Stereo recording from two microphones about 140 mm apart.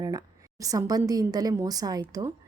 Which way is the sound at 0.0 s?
25° right (ahead or behind).